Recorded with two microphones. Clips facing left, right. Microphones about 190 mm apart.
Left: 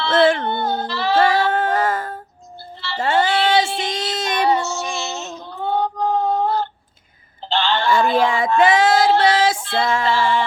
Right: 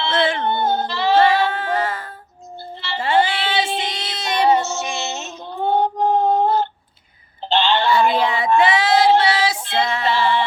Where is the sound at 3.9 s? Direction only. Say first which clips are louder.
Left 3 dB; 50° left (ahead or behind).